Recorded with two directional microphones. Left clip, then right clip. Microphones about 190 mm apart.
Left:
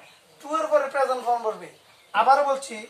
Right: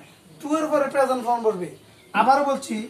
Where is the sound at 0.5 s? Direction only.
10° left (ahead or behind).